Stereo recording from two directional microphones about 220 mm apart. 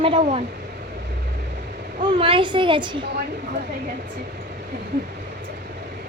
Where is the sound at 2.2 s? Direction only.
25° right (ahead or behind).